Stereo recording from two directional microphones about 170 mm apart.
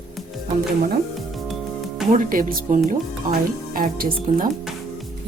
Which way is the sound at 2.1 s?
55° right (ahead or behind).